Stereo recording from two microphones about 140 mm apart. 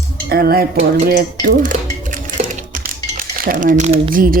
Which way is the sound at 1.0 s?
85° right.